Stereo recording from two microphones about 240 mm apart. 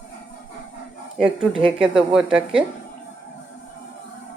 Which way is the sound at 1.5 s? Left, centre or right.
Right.